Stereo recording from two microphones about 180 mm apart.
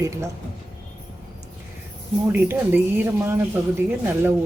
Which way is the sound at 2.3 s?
10° right (ahead or behind).